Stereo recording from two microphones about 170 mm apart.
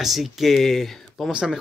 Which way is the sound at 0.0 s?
Centre (ahead or behind).